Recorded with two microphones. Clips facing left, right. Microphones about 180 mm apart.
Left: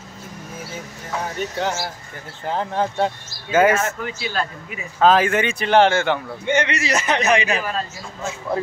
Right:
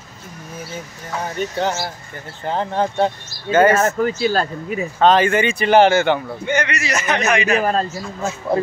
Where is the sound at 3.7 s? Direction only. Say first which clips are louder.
Right 6 dB; 45° right (ahead or behind).